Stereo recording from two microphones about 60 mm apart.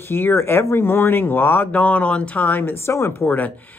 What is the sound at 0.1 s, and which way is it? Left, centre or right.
Speech, left.